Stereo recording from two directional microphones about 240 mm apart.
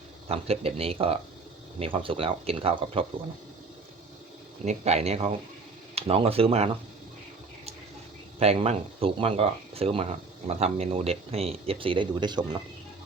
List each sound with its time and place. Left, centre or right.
0.3 s speech: right
4.6 s speech: right
8.4 s speech: right